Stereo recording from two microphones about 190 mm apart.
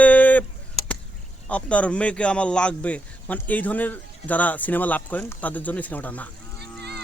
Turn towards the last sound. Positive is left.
turn(degrees=-60)  # may be behind; listen again after turning